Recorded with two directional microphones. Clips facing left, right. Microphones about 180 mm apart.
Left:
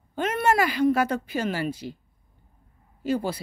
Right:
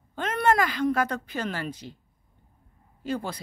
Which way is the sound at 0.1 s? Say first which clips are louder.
Left 1 dB; 10° left (ahead or behind).